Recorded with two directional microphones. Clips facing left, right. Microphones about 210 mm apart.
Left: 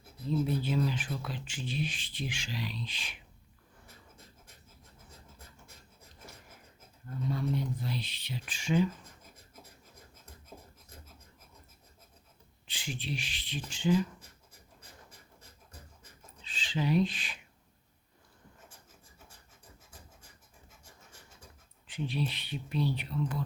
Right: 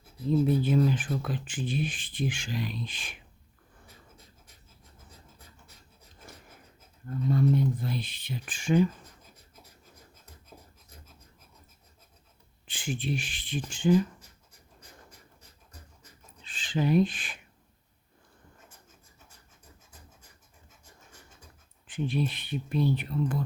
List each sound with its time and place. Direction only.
0.3 s speech: 50° right (ahead or behind)
7.3 s speech: 50° right (ahead or behind)
12.6 s speech: 50° right (ahead or behind)
16.4 s speech: 50° right (ahead or behind)
21.8 s speech: 50° right (ahead or behind)